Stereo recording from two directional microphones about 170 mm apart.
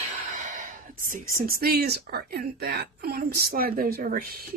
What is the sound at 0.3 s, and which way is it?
Speech, 45° right (ahead or behind).